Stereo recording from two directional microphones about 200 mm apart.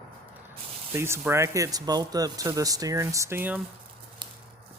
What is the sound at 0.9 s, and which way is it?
Speech, 10° right (ahead or behind).